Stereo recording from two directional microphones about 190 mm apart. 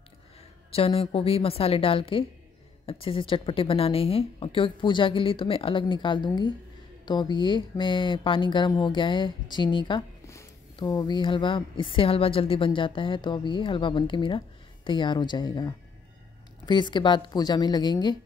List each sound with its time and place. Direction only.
0.7 s a woman's voice: 30° left (ahead or behind)